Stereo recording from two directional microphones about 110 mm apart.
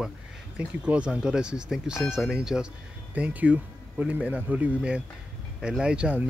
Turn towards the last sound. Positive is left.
turn(degrees=-10)  # may be behind; listen again after turning